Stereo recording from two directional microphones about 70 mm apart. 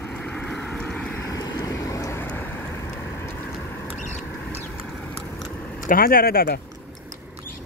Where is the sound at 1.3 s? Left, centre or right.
Left.